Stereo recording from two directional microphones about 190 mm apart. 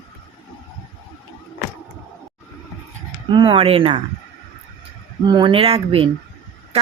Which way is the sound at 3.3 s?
25° right (ahead or behind).